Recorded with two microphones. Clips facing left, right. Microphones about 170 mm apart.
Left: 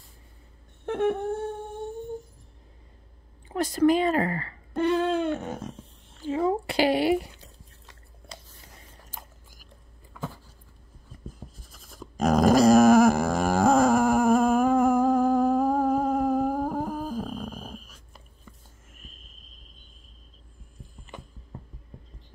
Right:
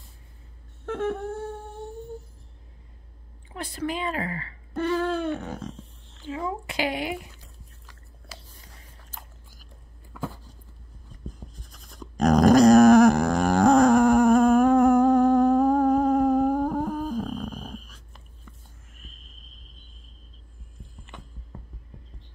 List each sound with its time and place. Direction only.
0.8 s a sound: 20° left (ahead or behind)
3.4 s speech: 40° left (ahead or behind)
4.7 s hoot: 20° left (ahead or behind)
6.2 s speech: 35° left (ahead or behind)
11.2 s dog: 5° left (ahead or behind)